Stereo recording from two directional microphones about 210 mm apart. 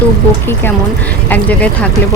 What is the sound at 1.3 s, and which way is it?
Speech, 5° left (ahead or behind).